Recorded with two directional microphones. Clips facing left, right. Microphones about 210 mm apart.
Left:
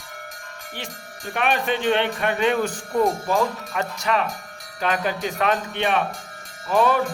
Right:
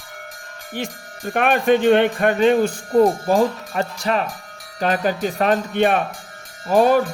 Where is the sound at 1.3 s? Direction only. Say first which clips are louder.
Right 7 dB; 45° right (ahead or behind).